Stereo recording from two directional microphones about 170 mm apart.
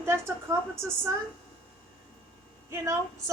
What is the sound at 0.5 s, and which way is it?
Speech, 15° right (ahead or behind).